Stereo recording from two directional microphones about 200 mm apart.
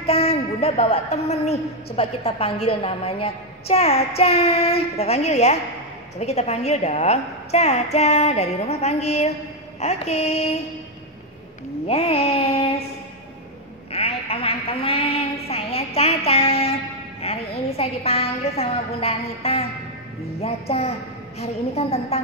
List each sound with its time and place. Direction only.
0.0 s a woman's voice: 30° left (ahead or behind)
11.9 s a sound: 30° left (ahead or behind)
13.9 s a woman's voice: 30° left (ahead or behind)